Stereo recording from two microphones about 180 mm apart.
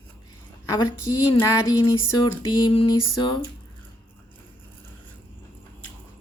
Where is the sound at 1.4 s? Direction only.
20° left (ahead or behind).